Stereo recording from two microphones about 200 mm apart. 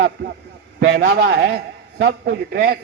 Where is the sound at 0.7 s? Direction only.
60° right (ahead or behind).